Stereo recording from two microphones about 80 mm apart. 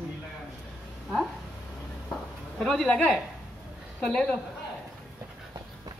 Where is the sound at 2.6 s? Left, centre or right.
Centre.